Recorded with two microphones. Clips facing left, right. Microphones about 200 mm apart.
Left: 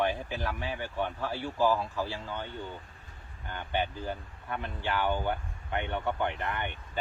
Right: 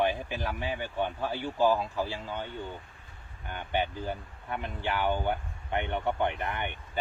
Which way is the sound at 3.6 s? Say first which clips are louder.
Right 1 dB; 15° right (ahead or behind).